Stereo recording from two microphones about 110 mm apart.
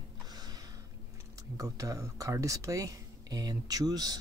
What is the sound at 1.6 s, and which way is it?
Speech, 30° right (ahead or behind).